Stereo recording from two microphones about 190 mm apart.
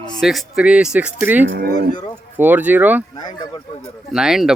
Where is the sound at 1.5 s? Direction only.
55° right (ahead or behind).